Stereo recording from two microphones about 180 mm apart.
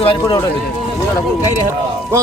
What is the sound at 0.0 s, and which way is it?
Speech, 30° left (ahead or behind).